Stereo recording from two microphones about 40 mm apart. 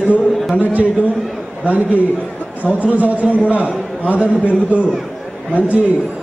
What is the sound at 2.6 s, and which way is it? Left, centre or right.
Speech, right.